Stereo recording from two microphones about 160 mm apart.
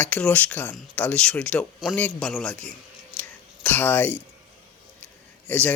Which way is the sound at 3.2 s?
10° left (ahead or behind).